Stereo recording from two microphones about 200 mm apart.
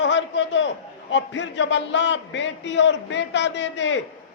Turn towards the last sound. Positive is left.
turn(degrees=65)  # may be behind; listen again after turning